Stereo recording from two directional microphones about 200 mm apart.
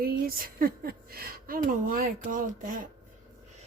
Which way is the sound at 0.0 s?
45° right (ahead or behind).